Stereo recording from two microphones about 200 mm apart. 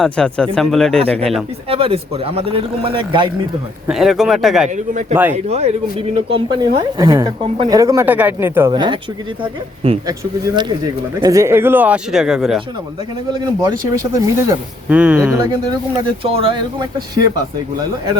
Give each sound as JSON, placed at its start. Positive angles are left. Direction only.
{"t": 0.0, "sound": "speech", "side_deg": 5}
{"t": 1.7, "sound": "a man's voice", "side_deg": -30}
{"t": 3.8, "sound": "speech", "side_deg": 0}
{"t": 4.7, "sound": "a man's voice", "side_deg": -40}
{"t": 7.0, "sound": "a man's voice", "side_deg": -15}
{"t": 13.3, "sound": "a man's voice", "side_deg": -20}
{"t": 16.2, "sound": "a man's voice", "side_deg": -30}